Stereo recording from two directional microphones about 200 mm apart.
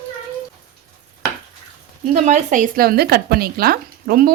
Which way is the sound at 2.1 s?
35° right (ahead or behind).